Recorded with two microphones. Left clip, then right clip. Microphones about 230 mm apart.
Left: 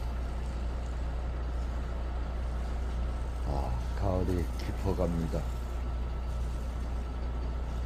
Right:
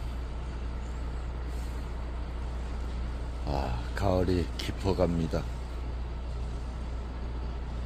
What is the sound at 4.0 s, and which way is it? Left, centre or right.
Speech, right.